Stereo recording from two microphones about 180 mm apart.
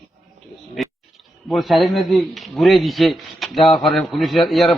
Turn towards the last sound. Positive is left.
turn(degrees=0)  # may be behind; listen again after turning